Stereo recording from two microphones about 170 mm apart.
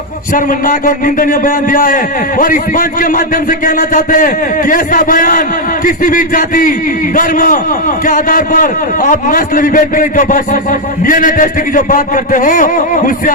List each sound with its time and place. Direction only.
0.3 s a man's voice: 55° left (ahead or behind)